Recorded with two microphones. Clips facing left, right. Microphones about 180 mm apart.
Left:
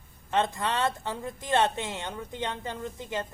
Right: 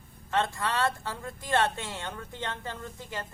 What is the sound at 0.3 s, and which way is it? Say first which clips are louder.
Speech: left 2 dB; 20° left (ahead or behind).